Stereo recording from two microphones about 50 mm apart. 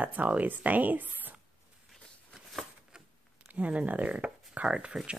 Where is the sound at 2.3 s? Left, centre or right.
Centre.